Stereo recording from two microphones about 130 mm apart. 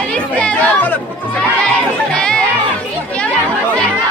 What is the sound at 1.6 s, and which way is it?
Music, 5° left (ahead or behind).